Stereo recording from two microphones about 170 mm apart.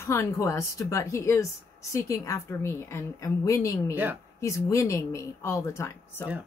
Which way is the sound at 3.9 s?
10° right (ahead or behind).